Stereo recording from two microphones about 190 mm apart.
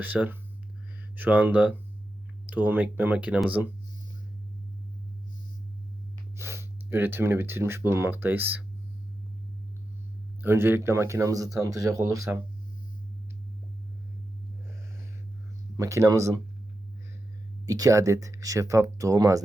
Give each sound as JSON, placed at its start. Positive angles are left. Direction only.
{"t": 0.0, "sound": "speech", "side_deg": -10}
{"t": 6.3, "sound": "speech", "side_deg": -15}
{"t": 10.4, "sound": "speech", "side_deg": -10}
{"t": 15.8, "sound": "speech", "side_deg": -15}
{"t": 17.7, "sound": "speech", "side_deg": -20}